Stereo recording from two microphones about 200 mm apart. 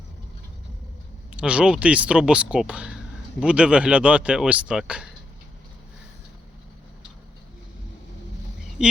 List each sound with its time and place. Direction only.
1.3 s speech: 5° right (ahead or behind)
8.8 s speech: 5° right (ahead or behind)